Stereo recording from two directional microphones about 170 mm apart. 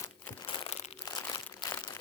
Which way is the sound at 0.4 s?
30° left (ahead or behind).